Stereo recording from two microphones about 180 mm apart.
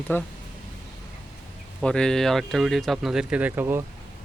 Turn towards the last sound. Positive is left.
turn(degrees=-10)  # may be behind; listen again after turning